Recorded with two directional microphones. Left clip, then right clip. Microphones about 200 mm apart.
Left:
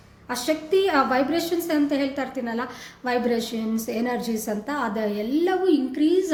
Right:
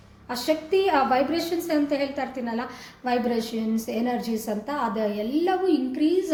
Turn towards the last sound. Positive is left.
turn(degrees=15)  # may be behind; listen again after turning